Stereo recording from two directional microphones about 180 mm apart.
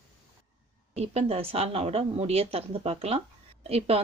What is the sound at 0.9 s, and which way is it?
Speech, 35° right (ahead or behind).